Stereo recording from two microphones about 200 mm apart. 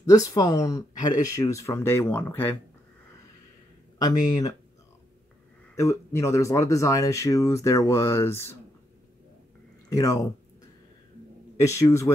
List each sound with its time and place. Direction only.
0.0 s speech: 15° left (ahead or behind)
4.0 s speech: 20° left (ahead or behind)
5.8 s speech: 15° left (ahead or behind)
9.8 s speech: 15° left (ahead or behind)
11.6 s speech: 15° left (ahead or behind)